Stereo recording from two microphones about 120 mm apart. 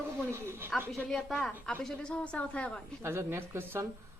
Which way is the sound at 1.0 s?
5° left (ahead or behind).